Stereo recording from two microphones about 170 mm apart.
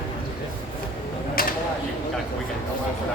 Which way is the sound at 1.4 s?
60° left (ahead or behind).